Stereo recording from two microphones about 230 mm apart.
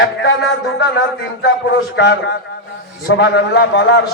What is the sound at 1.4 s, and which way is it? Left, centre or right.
A man's voice, left.